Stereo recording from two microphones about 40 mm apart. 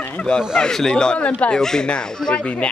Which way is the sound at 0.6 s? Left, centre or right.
Centre.